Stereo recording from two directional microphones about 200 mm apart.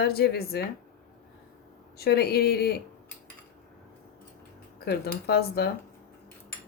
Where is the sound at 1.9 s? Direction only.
50° left (ahead or behind).